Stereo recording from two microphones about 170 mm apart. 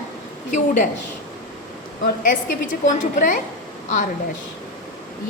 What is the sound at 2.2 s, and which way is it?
A woman's voice, 50° left (ahead or behind).